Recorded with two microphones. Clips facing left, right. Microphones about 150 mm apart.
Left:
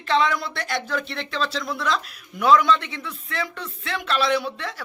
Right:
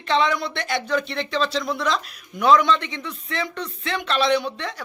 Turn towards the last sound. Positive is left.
turn(degrees=5)  # may be behind; listen again after turning